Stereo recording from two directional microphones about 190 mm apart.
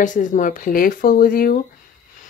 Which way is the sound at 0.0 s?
40° left (ahead or behind).